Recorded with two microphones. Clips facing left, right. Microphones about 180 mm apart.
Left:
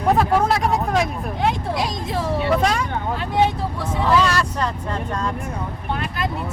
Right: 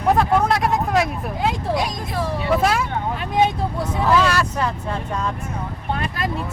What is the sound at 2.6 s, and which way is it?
Vehicle, 5° right (ahead or behind).